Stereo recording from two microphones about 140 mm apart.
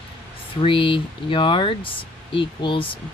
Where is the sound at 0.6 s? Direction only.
40° left (ahead or behind).